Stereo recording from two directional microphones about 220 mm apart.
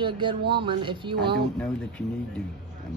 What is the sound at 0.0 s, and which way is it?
Speech, 20° right (ahead or behind).